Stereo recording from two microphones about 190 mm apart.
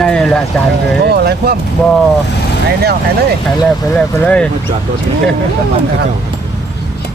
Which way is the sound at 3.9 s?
5° left (ahead or behind).